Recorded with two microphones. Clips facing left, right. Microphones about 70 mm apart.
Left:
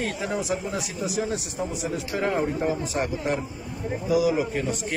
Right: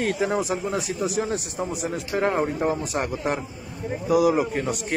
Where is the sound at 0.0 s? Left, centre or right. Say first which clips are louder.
Right 4 dB; right.